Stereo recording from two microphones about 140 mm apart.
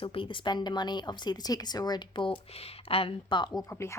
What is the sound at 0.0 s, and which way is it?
Speech, 40° left (ahead or behind).